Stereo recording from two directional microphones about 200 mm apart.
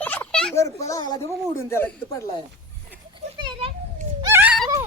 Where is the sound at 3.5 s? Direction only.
25° right (ahead or behind).